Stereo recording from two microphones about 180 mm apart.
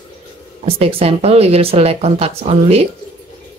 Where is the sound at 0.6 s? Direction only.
35° right (ahead or behind).